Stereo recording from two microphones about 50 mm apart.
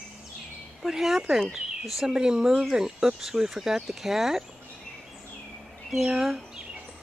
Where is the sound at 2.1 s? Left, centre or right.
Centre.